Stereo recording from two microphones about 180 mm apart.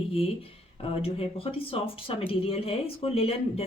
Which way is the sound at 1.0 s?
30° left (ahead or behind).